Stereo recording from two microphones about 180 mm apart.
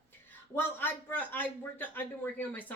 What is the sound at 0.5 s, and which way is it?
A man's voice, 10° left (ahead or behind).